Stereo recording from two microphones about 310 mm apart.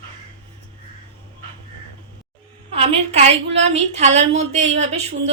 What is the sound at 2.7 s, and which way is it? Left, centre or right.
Speech, centre.